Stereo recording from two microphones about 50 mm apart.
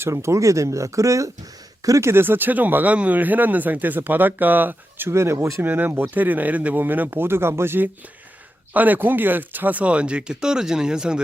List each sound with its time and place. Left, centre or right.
0.0 s speech: right
1.9 s speech: right
2.2 s speech: right
5.1 s speech: right
5.6 s speech: right
8.7 s speech: right; by 11.2 s centre